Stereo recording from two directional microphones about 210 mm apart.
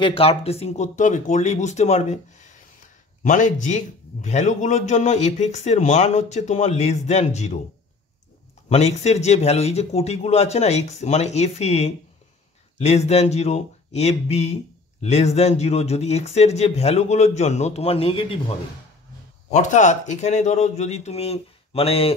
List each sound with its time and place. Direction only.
0.0 s speech: 25° left (ahead or behind)
8.6 s speech: 30° left (ahead or behind)
19.5 s speech: 35° left (ahead or behind)